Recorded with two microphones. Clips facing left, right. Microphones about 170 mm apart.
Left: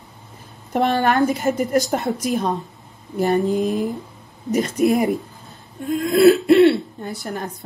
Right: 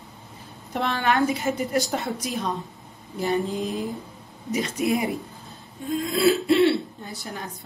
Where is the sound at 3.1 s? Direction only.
50° left (ahead or behind).